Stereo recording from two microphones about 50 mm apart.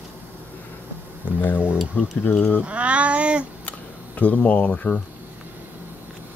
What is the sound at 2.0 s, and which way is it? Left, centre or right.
Speech, left.